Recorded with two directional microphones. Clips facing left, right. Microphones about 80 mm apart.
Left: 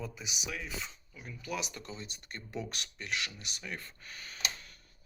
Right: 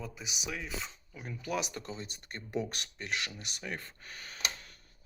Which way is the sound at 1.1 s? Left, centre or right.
Right.